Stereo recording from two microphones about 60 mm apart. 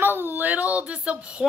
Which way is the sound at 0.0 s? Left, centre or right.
Right.